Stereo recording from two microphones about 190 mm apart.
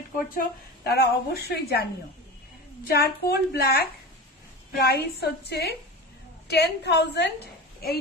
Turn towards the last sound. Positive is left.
turn(degrees=55)  # may be behind; listen again after turning